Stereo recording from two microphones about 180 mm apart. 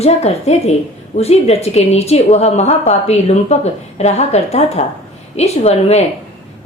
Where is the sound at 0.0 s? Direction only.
35° left (ahead or behind).